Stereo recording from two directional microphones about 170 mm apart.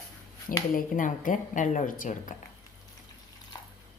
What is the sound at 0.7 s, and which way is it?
Speech, 50° left (ahead or behind).